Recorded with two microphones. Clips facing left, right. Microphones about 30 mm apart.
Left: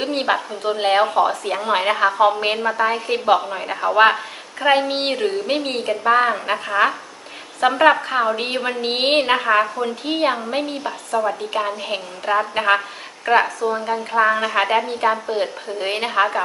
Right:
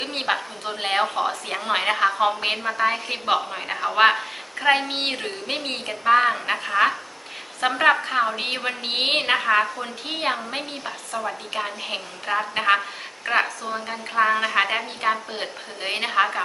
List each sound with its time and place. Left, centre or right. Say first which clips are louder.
0.0 s speech: left 5 dB; centre
0.3 s speech: left 7 dB; centre
0.8 s a woman's voice: left 6 dB; centre
11.1 s a woman's voice: left 8 dB; left
11.5 s a woman's voice: left 5 dB; centre